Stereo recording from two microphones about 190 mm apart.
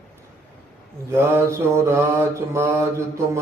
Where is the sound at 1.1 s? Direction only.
15° right (ahead or behind).